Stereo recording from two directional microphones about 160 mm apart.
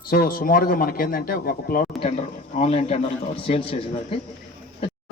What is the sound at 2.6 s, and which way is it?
Speech, 40° left (ahead or behind).